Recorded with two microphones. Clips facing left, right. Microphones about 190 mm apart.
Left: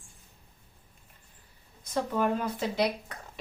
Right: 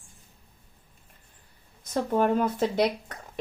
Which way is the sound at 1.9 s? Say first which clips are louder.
Right 4 dB; 50° right (ahead or behind).